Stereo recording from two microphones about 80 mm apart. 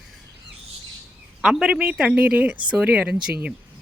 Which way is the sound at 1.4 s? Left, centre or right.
Centre.